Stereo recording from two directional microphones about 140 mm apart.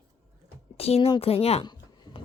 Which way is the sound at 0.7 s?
45° left (ahead or behind).